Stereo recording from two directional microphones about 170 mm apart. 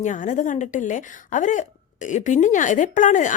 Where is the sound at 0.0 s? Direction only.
45° left (ahead or behind).